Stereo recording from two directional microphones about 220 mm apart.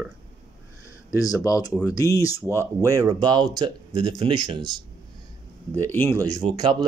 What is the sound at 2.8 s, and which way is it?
Speech, 15° right (ahead or behind).